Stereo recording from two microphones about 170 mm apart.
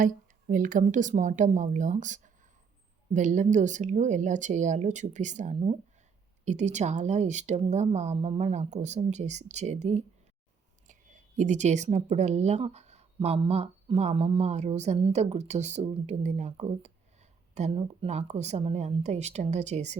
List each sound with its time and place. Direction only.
0.4 s speech: 55° right (ahead or behind)